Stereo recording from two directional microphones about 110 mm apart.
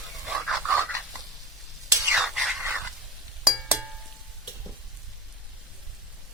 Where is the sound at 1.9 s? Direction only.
25° right (ahead or behind).